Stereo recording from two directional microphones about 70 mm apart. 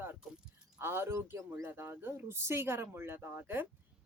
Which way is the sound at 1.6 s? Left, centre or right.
Right.